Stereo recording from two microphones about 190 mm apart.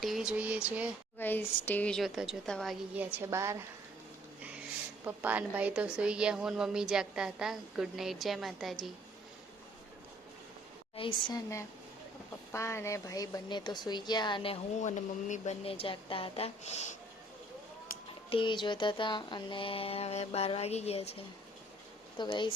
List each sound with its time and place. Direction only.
0.0 s a sound: centre (ahead or behind)
1.2 s a woman's voice: 10° left (ahead or behind)
2.9 s a woman's voice: 10° right (ahead or behind)
5.0 s a woman's voice: 10° right (ahead or behind)
10.9 s speech: 25° left (ahead or behind)
18.3 s speech: 25° left (ahead or behind)